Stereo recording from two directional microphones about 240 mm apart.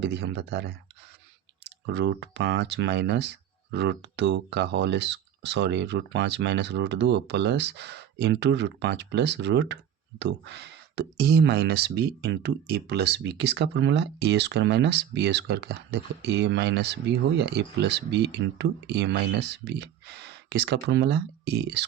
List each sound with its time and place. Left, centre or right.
0.0 s speech: right